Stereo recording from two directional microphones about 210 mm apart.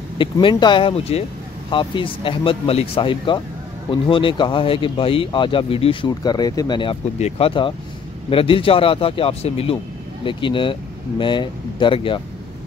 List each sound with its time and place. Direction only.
0.2 s speech: 25° left (ahead or behind)